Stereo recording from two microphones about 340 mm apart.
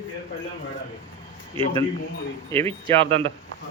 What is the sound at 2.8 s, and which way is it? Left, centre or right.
Speech, centre.